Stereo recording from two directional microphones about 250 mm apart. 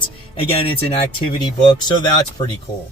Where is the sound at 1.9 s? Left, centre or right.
Centre.